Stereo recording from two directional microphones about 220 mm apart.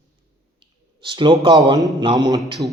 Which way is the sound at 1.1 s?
25° right (ahead or behind).